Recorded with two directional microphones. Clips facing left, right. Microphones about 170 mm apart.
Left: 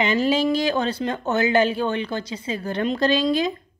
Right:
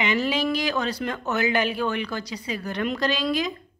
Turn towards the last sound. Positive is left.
turn(degrees=30)  # may be behind; listen again after turning